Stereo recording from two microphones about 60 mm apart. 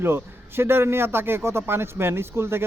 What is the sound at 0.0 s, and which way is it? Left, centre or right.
A man's voice, right.